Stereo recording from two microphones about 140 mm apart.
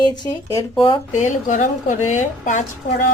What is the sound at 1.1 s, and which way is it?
A woman's voice, 60° left (ahead or behind).